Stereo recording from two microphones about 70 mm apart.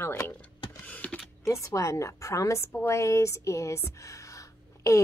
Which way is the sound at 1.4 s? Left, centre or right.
Left.